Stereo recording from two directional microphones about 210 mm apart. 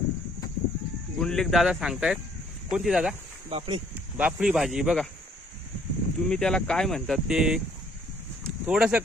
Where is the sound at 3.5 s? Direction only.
25° right (ahead or behind).